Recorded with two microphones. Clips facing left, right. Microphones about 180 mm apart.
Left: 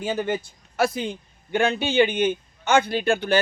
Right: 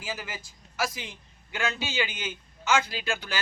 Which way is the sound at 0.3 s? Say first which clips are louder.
Left 15 dB; 60° left (ahead or behind).